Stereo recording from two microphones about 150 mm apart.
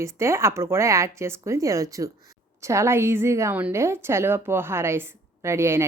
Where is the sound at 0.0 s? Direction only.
20° right (ahead or behind).